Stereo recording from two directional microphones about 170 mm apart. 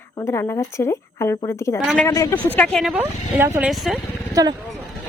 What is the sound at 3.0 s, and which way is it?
Speech, 15° right (ahead or behind).